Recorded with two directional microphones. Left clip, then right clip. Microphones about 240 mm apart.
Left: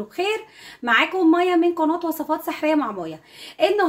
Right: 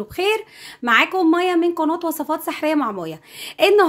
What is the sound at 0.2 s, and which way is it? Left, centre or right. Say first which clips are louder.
Speech: right 4 dB; right.